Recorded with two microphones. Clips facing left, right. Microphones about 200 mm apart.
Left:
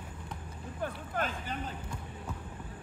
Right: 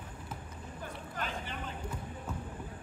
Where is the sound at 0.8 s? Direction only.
45° left (ahead or behind).